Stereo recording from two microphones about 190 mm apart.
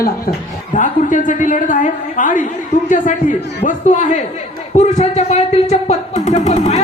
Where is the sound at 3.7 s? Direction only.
40° left (ahead or behind).